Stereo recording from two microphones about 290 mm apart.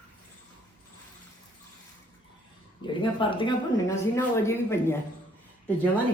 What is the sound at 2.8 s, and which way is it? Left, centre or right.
A woman's voice, centre.